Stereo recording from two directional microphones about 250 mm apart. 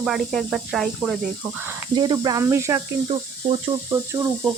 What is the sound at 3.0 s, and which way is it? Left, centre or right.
Speech, right.